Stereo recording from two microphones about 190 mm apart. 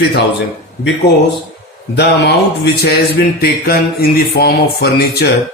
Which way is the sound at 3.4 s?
55° left (ahead or behind).